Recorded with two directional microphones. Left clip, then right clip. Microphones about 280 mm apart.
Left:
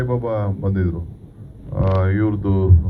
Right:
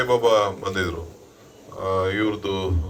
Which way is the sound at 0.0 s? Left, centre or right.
Right.